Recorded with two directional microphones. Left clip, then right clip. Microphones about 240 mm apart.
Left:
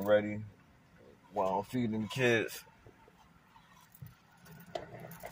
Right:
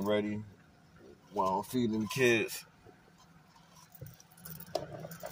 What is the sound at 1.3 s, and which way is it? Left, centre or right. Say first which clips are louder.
Speech: right 1 dB; right.